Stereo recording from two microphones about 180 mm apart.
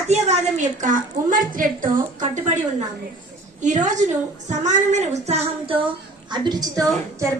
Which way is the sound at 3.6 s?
45° right (ahead or behind).